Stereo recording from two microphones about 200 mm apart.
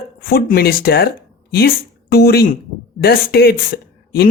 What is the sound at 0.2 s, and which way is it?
Speech, 50° left (ahead or behind).